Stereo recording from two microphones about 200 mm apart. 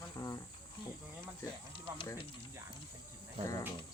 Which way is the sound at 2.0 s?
25° left (ahead or behind).